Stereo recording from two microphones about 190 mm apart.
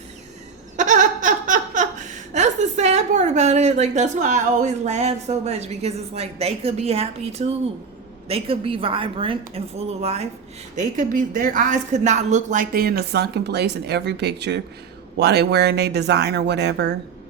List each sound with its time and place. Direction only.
0.8 s a woman's voice: 40° right (ahead or behind)
10.8 s a woman's voice: 45° right (ahead or behind); by 16.9 s 60° right (ahead or behind)